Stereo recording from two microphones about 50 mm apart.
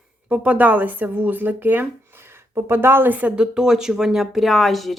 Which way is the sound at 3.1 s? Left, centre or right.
Right.